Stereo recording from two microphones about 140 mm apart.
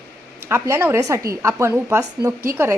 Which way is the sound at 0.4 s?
20° right (ahead or behind).